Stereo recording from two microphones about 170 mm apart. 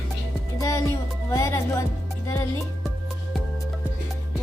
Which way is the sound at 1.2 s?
20° left (ahead or behind).